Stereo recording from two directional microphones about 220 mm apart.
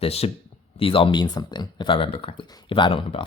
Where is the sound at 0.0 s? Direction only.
25° left (ahead or behind).